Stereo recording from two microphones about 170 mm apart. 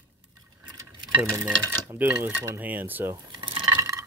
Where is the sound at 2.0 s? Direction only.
10° right (ahead or behind).